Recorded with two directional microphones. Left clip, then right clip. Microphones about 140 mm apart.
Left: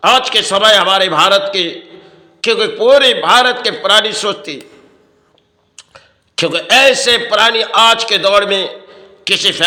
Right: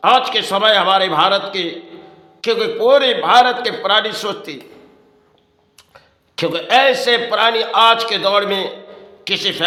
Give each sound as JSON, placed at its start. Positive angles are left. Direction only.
{"t": 0.0, "sound": "a man's voice", "side_deg": 15}
{"t": 5.7, "sound": "a man's voice", "side_deg": 15}